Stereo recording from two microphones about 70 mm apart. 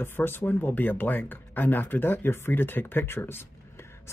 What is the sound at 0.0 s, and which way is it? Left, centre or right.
Speech, left.